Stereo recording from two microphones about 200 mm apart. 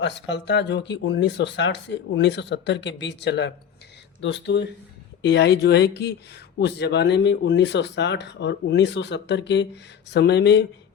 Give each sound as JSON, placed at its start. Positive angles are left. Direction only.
{"t": 0.0, "sound": "speech", "side_deg": 60}